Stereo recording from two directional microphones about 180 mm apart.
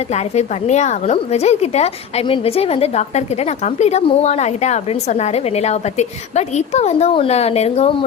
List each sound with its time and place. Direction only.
0.1 s a woman's voice: 40° left (ahead or behind)